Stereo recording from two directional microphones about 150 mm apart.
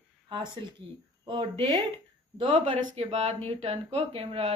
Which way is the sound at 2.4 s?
40° right (ahead or behind).